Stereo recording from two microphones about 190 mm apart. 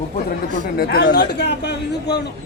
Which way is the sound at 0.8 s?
60° left (ahead or behind).